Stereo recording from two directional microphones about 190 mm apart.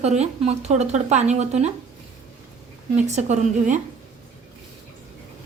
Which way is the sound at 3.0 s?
35° right (ahead or behind).